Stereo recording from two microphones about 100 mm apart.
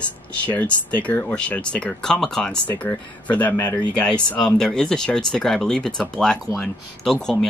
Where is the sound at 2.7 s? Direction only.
15° left (ahead or behind).